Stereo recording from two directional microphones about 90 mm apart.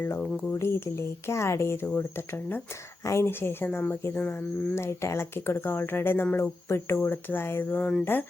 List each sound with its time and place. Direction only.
0.5 s speech: 30° left (ahead or behind); by 8.0 s 10° left (ahead or behind)